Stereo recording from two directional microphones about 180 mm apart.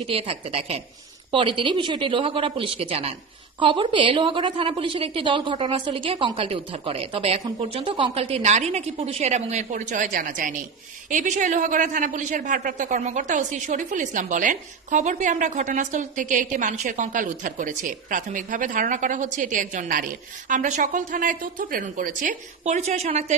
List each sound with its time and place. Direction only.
0.1 s a woman's voice: 35° right (ahead or behind)